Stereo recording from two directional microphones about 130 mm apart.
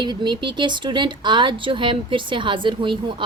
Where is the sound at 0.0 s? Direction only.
35° right (ahead or behind).